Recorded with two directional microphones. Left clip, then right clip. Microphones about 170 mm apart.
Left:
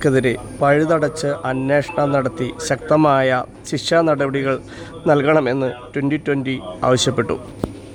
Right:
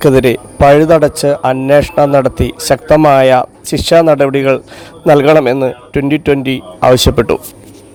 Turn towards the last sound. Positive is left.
turn(degrees=-35)  # may be behind; listen again after turning